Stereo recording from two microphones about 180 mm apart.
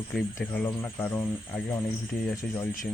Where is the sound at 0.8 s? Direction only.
15° left (ahead or behind).